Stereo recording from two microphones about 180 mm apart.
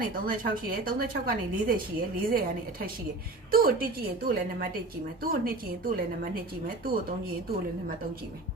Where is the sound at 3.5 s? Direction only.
55° right (ahead or behind).